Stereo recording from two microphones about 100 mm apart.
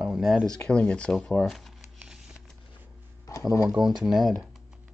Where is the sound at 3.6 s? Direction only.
5° right (ahead or behind).